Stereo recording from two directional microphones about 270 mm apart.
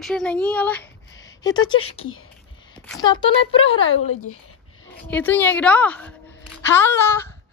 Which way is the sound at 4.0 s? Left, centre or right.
Left.